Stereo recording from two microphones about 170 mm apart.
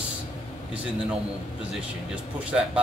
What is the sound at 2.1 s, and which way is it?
Speech, 5° right (ahead or behind).